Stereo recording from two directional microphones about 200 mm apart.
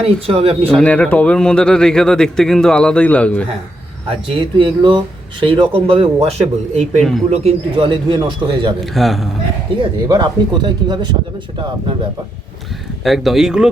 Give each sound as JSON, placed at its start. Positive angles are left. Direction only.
{"t": 0.0, "sound": "speech", "side_deg": -30}
{"t": 0.8, "sound": "speech", "side_deg": 5}
{"t": 4.3, "sound": "speech", "side_deg": -25}
{"t": 8.8, "sound": "speech", "side_deg": 0}
{"t": 10.1, "sound": "speech", "side_deg": -20}
{"t": 13.1, "sound": "speech", "side_deg": 0}